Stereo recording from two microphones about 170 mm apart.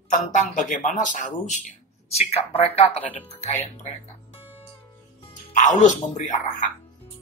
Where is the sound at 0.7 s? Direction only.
45° left (ahead or behind).